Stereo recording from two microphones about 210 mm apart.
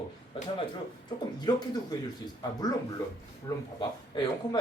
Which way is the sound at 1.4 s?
20° left (ahead or behind).